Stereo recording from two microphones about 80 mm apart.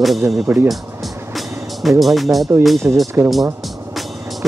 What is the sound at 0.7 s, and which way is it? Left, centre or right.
Music, centre.